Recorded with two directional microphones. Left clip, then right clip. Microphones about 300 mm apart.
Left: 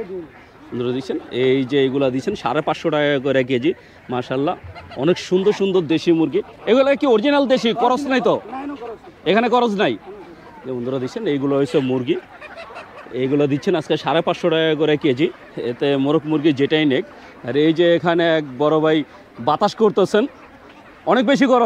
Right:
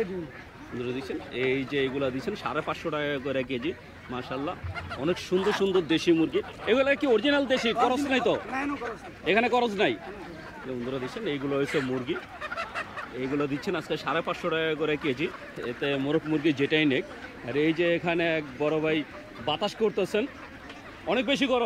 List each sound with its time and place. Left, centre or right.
0.7 s speech: left
5.3 s speech: left
10.9 s speech: left
13.2 s a man's voice: left